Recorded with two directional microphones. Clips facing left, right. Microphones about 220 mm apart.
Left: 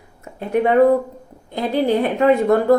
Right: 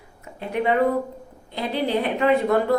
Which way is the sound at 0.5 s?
45° left (ahead or behind).